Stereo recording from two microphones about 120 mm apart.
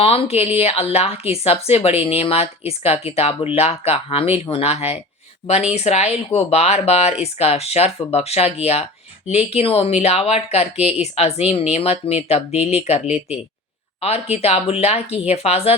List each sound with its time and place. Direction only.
0.0 s speech: 55° left (ahead or behind)
14.0 s speech: 60° left (ahead or behind)